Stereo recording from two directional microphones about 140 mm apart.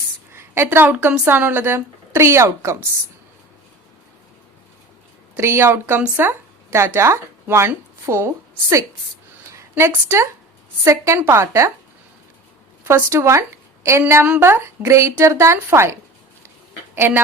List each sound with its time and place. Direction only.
0.3 s speech: 20° right (ahead or behind)
5.4 s a woman's voice: 20° right (ahead or behind)
9.5 s a woman's voice: 20° right (ahead or behind)
12.8 s a woman's voice: 20° right (ahead or behind)